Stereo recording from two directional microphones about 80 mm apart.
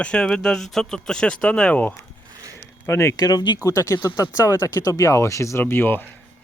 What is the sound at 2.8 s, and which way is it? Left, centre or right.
Speech, left.